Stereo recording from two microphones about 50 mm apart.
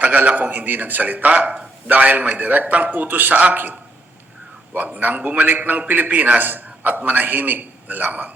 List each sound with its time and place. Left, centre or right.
0.0 s a man's voice: right